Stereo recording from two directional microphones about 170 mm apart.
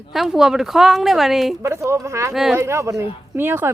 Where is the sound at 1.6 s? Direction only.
15° right (ahead or behind).